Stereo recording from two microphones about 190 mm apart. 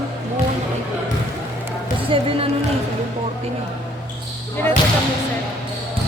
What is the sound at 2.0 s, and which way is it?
Speech, 30° right (ahead or behind).